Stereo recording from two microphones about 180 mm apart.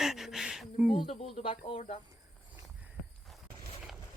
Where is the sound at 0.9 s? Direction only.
30° left (ahead or behind).